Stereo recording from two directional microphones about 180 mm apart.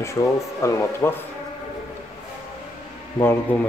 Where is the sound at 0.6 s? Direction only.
15° left (ahead or behind).